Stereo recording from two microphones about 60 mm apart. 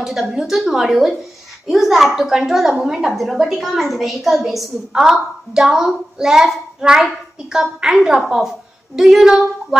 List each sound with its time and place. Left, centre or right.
0.0 s a woman's voice: centre